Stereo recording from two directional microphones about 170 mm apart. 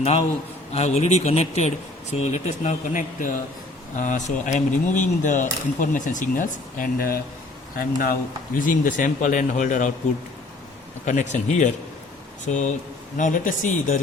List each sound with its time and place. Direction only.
0.7 s speech: 40° left (ahead or behind)
11.0 s speech: 45° left (ahead or behind)